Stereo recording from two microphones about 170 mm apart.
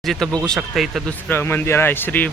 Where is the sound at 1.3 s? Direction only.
15° left (ahead or behind).